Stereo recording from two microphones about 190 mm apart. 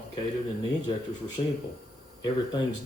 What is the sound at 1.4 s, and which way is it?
Speech, 30° left (ahead or behind).